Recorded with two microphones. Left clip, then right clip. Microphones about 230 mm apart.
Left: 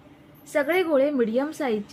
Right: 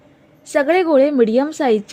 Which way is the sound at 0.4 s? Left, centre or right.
Right.